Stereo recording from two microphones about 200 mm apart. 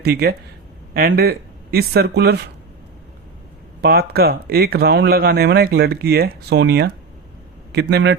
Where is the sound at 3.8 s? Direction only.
50° right (ahead or behind).